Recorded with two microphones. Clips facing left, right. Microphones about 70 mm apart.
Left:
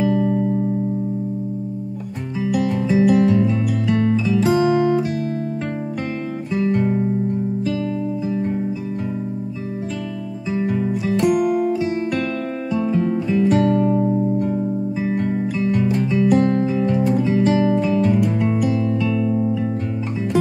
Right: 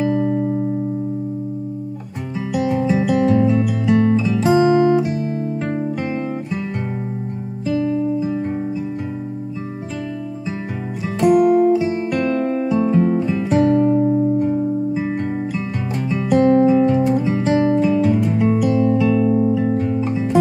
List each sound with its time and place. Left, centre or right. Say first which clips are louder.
0.0 s music: even; centre
2.5 s music: right 1 dB; centre
4.6 s guitar: right 3 dB; centre
6.5 s guitar: left 6 dB; centre
7.6 s music: right 3 dB; centre
11.2 s music: right 7 dB; centre